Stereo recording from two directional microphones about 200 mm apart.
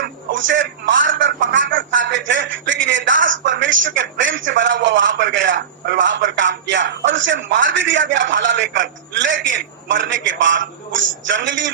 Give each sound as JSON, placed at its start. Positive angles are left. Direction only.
{"t": 0.3, "sound": "speech", "side_deg": -70}